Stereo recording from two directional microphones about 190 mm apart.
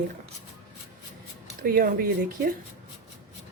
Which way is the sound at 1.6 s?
50° right (ahead or behind).